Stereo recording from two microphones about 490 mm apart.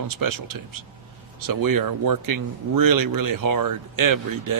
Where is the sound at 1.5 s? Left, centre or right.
Right.